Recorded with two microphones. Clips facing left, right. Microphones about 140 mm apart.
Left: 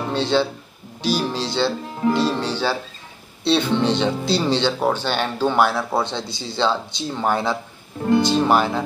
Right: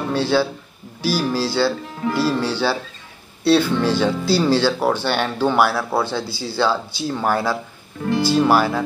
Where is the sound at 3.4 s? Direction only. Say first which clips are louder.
Right 3 dB; 5° right (ahead or behind).